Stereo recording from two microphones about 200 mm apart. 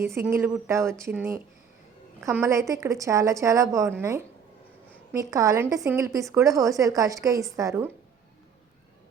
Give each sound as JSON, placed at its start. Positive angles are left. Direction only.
{"t": 0.0, "sound": "a woman's voice", "side_deg": -10}